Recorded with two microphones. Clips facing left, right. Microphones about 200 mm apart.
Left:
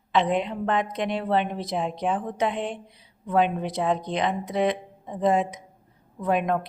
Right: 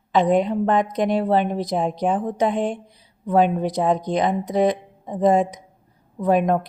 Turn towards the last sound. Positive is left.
turn(degrees=-40)  # may be behind; listen again after turning